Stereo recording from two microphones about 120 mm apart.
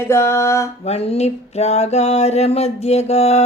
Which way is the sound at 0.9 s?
60° left (ahead or behind).